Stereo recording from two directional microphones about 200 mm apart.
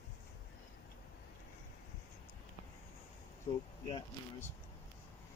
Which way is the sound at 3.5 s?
25° left (ahead or behind).